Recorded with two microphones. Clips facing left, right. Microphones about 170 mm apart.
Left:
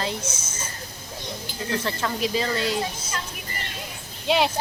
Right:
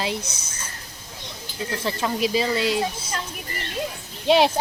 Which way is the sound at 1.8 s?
15° right (ahead or behind).